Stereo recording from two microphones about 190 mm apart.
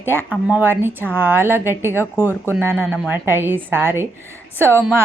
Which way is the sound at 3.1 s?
10° right (ahead or behind).